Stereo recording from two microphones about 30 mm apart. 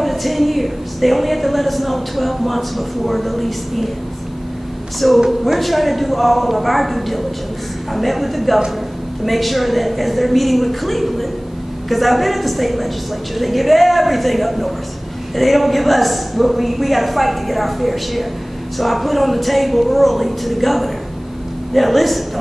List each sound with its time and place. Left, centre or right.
0.0 s a woman's voice: centre
5.0 s a woman's voice: centre